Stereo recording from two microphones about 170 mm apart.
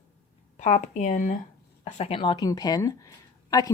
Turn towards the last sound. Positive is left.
turn(degrees=20)  # may be behind; listen again after turning